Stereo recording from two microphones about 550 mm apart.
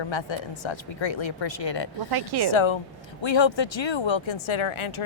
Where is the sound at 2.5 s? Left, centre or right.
Left.